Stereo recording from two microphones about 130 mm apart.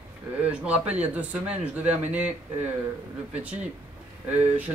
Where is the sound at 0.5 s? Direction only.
10° right (ahead or behind).